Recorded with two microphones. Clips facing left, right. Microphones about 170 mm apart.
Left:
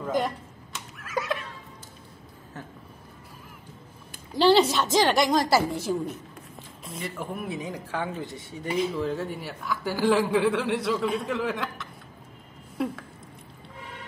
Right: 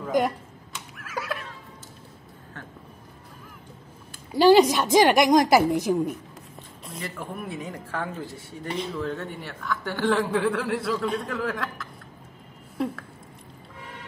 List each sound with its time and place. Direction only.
1.0 s neigh: 5° right (ahead or behind)
4.3 s a woman's voice: 10° right (ahead or behind)
6.8 s speech: centre (ahead or behind)
12.7 s a sound: centre (ahead or behind)